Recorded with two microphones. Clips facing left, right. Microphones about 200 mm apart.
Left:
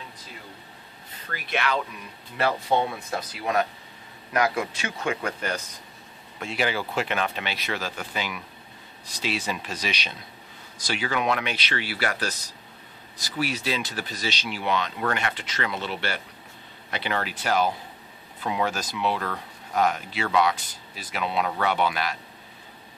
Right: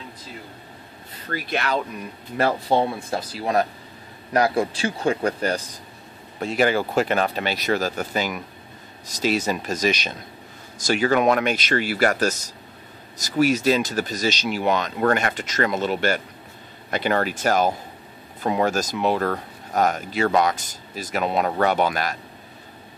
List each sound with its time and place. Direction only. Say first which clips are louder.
1.3 s speech: right 3 dB; 40° right (ahead or behind)